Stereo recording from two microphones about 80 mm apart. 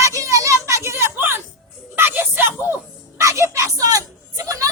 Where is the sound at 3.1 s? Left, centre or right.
Right.